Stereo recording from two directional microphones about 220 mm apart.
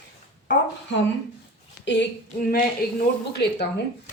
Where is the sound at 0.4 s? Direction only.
55° left (ahead or behind).